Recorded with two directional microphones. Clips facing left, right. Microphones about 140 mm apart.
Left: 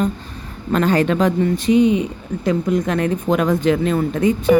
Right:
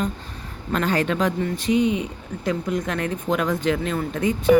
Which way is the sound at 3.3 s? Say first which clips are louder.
Left 4 dB; 60° left (ahead or behind).